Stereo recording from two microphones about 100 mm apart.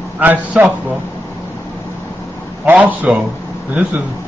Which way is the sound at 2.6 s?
15° right (ahead or behind).